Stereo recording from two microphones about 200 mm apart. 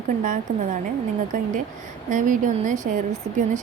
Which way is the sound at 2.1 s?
40° right (ahead or behind).